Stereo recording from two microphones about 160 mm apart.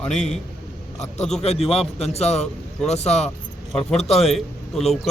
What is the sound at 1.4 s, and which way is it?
A man's voice, 40° left (ahead or behind).